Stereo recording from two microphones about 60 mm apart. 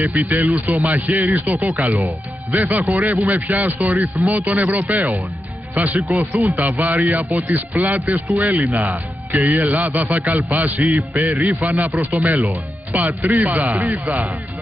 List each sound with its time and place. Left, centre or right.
0.0 s a man's voice: right